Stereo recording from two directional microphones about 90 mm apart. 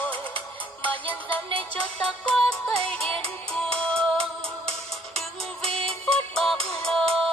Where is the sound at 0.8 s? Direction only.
20° left (ahead or behind).